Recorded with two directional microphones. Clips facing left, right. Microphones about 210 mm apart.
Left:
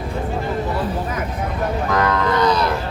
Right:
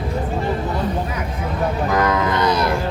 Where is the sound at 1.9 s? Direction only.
10° right (ahead or behind).